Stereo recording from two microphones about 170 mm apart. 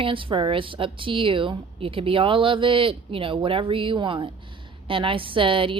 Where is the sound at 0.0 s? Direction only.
30° right (ahead or behind).